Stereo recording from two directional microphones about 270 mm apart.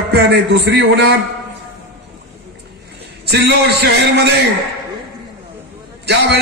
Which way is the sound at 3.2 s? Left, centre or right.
Right.